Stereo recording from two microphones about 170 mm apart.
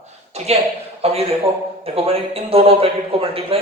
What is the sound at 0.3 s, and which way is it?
Speech, 40° right (ahead or behind).